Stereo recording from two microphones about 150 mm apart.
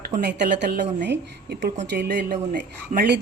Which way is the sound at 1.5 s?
90° right.